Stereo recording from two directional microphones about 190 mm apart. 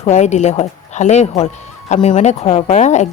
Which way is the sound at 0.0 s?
35° left (ahead or behind).